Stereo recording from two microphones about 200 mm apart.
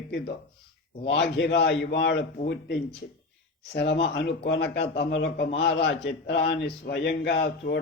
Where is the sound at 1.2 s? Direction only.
60° left (ahead or behind).